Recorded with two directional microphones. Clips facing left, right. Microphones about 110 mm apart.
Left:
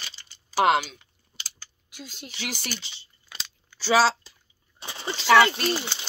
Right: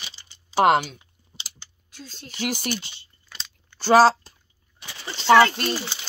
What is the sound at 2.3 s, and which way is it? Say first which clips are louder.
Speech: right 8 dB; 45° right (ahead or behind).